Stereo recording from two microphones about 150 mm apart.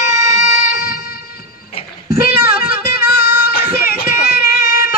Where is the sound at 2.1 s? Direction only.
85° left.